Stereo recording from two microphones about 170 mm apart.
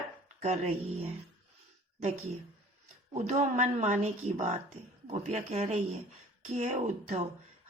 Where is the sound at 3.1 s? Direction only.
40° right (ahead or behind).